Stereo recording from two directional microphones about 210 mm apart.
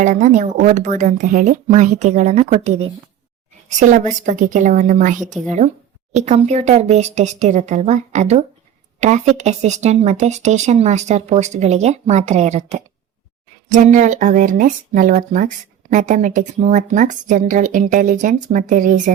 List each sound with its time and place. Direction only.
0.0 s speech: 35° right (ahead or behind)